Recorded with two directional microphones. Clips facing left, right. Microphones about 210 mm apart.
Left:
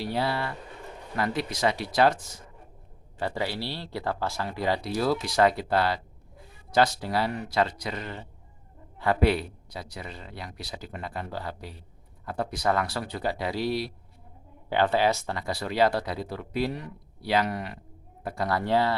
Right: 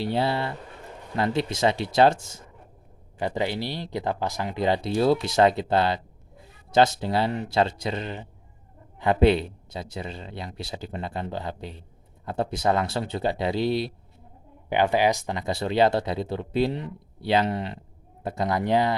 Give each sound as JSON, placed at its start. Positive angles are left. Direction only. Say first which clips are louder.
{"t": 0.0, "sound": "speech", "louder": "right 3 dB", "side_deg": -25}